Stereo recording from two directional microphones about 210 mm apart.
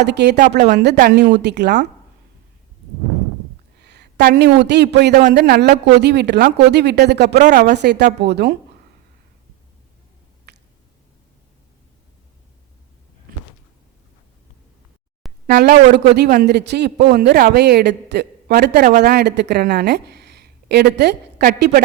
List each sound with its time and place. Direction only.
0.0 s a man's voice: 55° right (ahead or behind)
0.3 s speech: 40° right (ahead or behind)
0.8 s a man's voice: 50° right (ahead or behind)
3.8 s a man's voice: 50° right (ahead or behind)
10.5 s a sound: 50° right (ahead or behind)
15.4 s a man's voice: 50° right (ahead or behind)